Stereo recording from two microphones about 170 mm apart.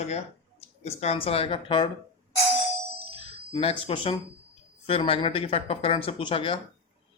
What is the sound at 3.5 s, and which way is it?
Speech, 35° left (ahead or behind).